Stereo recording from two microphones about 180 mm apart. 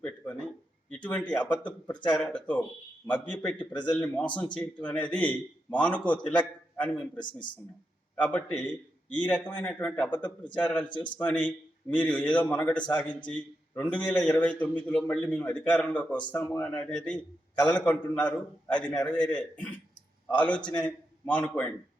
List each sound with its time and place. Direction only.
0.9 s a man's voice: 10° left (ahead or behind)
7.3 s a man's voice: 25° left (ahead or behind)
8.1 s a man's voice: 10° left (ahead or behind)
10.8 s a man's voice: 25° left (ahead or behind)
11.2 s a man's voice: 10° left (ahead or behind)